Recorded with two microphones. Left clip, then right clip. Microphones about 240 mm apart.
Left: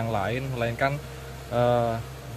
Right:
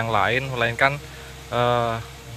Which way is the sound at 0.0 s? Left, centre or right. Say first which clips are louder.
Right 7 dB; centre.